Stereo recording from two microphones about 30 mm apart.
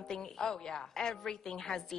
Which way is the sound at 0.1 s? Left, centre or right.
Left.